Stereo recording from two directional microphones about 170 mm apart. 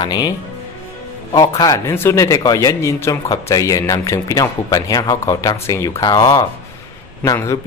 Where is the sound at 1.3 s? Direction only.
25° left (ahead or behind).